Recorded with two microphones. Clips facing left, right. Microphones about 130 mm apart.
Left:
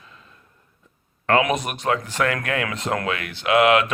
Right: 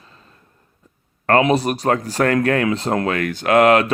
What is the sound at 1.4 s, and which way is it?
Speech, 35° right (ahead or behind).